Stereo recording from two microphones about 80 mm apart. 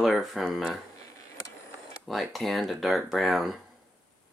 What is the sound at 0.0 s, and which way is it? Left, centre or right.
Speech, centre.